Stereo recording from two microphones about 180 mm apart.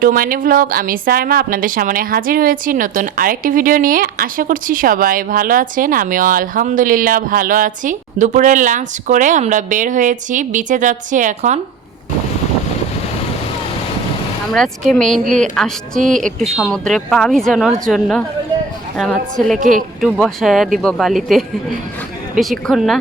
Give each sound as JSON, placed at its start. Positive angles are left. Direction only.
{"t": 0.0, "sound": "a woman's voice", "side_deg": -50}
{"t": 14.5, "sound": "a woman's voice", "side_deg": 5}
{"t": 19.5, "sound": "a woman's voice", "side_deg": -45}
{"t": 20.0, "sound": "a woman's voice", "side_deg": 5}